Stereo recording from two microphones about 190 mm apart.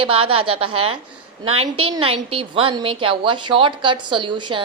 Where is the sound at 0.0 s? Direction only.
30° right (ahead or behind).